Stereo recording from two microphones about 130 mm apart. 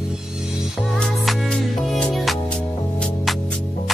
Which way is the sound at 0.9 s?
5° left (ahead or behind).